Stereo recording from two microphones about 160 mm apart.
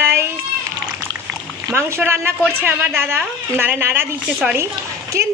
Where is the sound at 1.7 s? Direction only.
15° right (ahead or behind).